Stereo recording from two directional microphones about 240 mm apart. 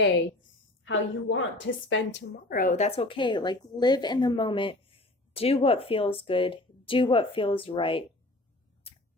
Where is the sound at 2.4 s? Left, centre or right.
Left.